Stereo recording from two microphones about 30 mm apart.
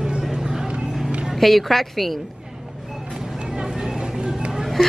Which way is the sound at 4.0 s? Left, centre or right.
Right.